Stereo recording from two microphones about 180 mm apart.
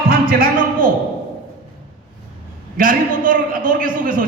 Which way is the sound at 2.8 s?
50° right (ahead or behind).